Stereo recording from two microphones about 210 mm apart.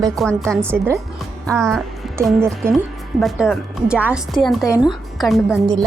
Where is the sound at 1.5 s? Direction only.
5° left (ahead or behind).